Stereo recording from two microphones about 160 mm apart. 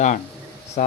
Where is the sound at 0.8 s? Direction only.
55° left (ahead or behind).